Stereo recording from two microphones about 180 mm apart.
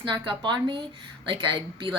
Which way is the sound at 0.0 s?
25° right (ahead or behind).